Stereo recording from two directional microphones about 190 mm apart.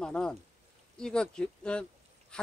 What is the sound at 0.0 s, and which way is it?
Speech, 5° left (ahead or behind).